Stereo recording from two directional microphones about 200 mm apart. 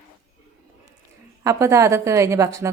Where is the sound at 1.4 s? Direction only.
15° right (ahead or behind).